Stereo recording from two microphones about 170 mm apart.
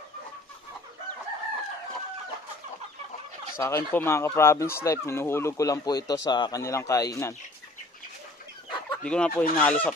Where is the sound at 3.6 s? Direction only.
15° left (ahead or behind).